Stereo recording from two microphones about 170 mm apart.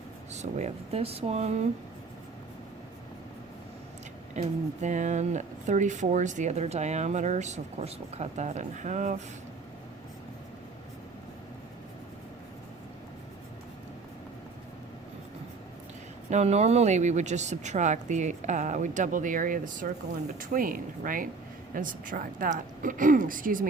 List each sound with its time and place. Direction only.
0.3 s speech: 40° right (ahead or behind)
4.4 s speech: 45° right (ahead or behind)
16.3 s speech: 40° right (ahead or behind)